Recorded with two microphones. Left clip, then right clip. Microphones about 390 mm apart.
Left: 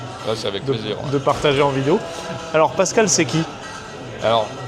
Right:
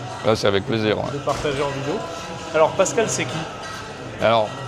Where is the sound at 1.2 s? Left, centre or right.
Left.